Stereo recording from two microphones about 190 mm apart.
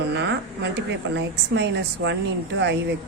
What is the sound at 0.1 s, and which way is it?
A woman's voice, 65° right (ahead or behind).